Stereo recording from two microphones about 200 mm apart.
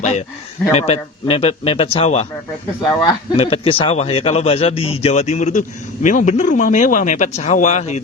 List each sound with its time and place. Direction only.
0.0 s a man's voice: 35° left (ahead or behind)